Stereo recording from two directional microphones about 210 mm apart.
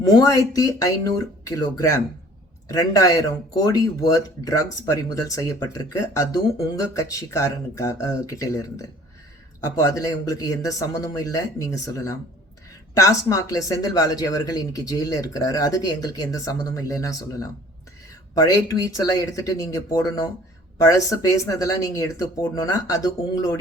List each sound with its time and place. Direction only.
0.1 s speech: 15° left (ahead or behind)